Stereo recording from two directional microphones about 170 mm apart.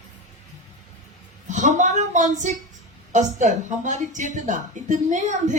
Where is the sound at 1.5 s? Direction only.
45° right (ahead or behind).